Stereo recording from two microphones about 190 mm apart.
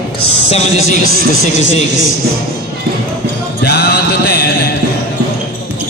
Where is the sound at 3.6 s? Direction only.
60° left (ahead or behind).